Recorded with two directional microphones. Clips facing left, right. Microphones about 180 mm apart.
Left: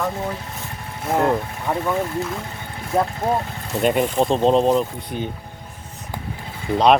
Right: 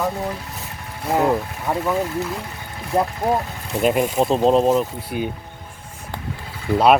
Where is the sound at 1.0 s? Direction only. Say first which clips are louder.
Right 1 dB; centre (ahead or behind).